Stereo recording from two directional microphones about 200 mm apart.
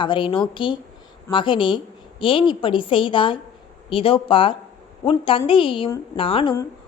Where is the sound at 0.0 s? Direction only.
25° left (ahead or behind).